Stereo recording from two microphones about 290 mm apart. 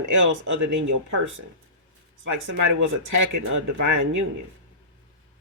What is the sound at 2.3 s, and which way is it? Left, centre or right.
Speech, right.